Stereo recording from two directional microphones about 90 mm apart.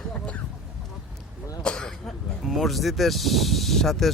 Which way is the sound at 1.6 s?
10° left (ahead or behind).